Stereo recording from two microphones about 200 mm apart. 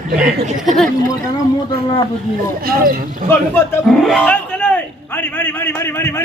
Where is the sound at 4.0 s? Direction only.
Centre (ahead or behind).